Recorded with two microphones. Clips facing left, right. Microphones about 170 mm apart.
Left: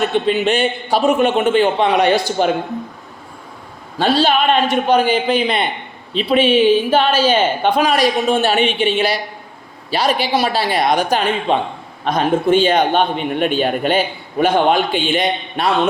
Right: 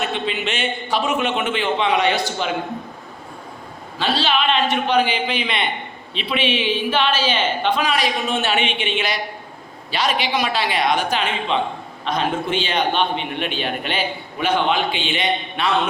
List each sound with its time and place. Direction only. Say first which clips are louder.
0.1 s a man's voice: left 8 dB; 40° left (ahead or behind)
3.9 s a man's voice: left 6 dB; 50° left (ahead or behind)